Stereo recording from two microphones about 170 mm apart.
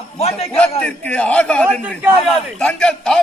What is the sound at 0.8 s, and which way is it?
A man's voice, 10° left (ahead or behind).